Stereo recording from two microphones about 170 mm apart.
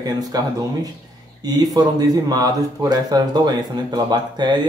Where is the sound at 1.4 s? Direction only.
25° right (ahead or behind).